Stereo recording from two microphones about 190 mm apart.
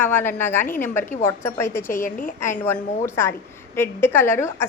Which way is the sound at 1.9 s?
45° left (ahead or behind).